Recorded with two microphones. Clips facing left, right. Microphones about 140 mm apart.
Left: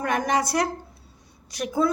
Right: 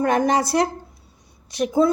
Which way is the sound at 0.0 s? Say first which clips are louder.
Right 5 dB; 30° right (ahead or behind).